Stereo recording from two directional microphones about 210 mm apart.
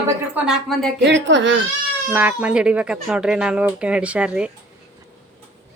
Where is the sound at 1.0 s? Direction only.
60° right (ahead or behind).